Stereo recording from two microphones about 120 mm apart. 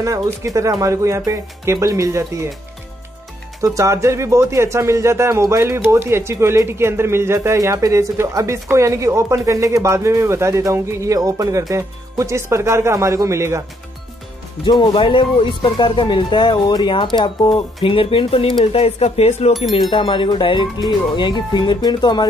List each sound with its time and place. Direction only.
0.0 s speech: 25° right (ahead or behind)
3.6 s speech: 25° right (ahead or behind)
14.6 s speech: 40° left (ahead or behind); by 19.5 s 60° left (ahead or behind)
19.9 s speech: 45° left (ahead or behind)